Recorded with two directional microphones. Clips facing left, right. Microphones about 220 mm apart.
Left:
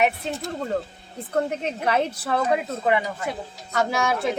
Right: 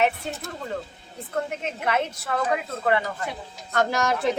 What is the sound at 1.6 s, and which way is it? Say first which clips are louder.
Speech: left 3 dB; 35° left (ahead or behind).